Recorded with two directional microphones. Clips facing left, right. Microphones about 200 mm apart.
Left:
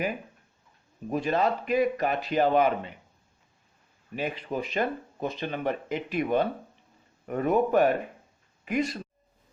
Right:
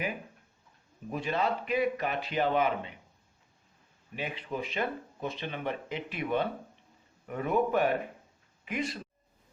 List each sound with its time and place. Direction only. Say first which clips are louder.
1.1 s a man's voice: left 5 dB; 40° left (ahead or behind)
4.1 s a man's voice: left 5 dB; 45° left (ahead or behind)